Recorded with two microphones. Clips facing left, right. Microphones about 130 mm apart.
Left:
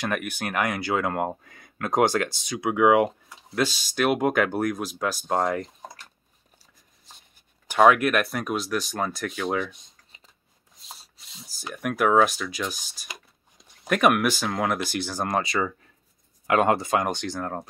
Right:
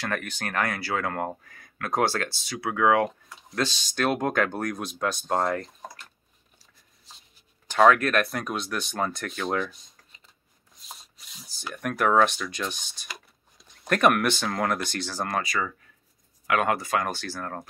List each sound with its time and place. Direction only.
0.0 s speech: 15° left (ahead or behind)
7.6 s speech: 10° left (ahead or behind)
11.7 s speech: 5° left (ahead or behind)
13.8 s speech: 5° left (ahead or behind)